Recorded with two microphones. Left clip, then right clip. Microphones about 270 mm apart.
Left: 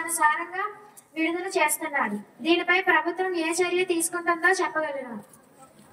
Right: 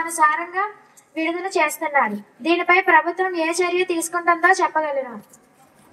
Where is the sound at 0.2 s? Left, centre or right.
Centre.